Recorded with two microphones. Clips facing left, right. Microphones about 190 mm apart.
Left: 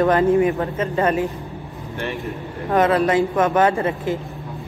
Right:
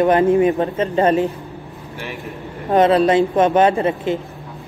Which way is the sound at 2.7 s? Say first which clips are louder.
Right 4 dB; 25° right (ahead or behind).